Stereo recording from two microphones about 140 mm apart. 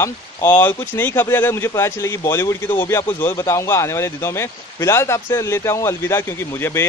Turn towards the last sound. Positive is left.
turn(degrees=15)  # may be behind; listen again after turning